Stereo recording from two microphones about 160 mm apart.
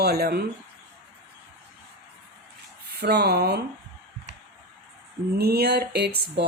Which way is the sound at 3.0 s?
90° right.